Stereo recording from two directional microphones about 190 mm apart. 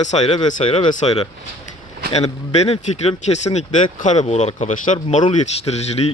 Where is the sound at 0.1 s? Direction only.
30° left (ahead or behind).